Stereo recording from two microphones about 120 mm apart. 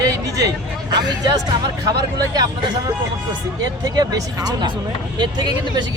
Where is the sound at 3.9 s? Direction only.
35° right (ahead or behind).